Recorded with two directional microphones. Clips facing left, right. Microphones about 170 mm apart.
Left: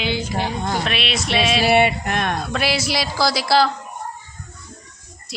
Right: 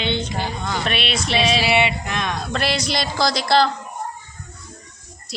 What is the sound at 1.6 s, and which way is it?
Speech, 50° left (ahead or behind).